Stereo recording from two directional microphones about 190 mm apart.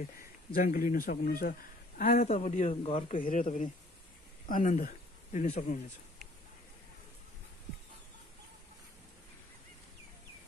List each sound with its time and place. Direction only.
0.6 s a man's voice: 45° left (ahead or behind)